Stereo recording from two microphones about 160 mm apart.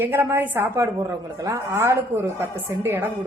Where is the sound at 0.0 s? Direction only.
15° right (ahead or behind).